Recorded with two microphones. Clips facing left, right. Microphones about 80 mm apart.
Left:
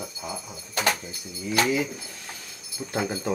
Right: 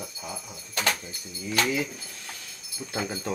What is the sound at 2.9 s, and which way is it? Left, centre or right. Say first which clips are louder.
Speech: left 4 dB; centre.